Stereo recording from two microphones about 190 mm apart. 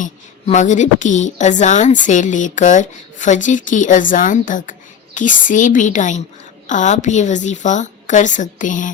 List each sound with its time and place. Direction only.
0.0 s a woman's voice: 40° left (ahead or behind)